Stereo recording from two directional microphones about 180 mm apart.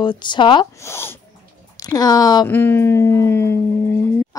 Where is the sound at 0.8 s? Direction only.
15° left (ahead or behind).